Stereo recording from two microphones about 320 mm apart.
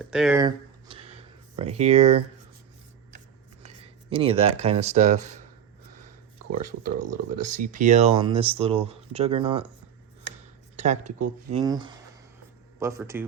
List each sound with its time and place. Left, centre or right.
0.0 s a sound: centre
1.5 s speech: centre
3.6 s speech: centre
6.7 s speech: right
7.4 s speech: right
10.8 s speech: right
11.6 s speech: centre